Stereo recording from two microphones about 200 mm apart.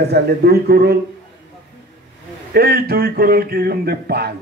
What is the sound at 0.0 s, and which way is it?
Speech, 55° right (ahead or behind).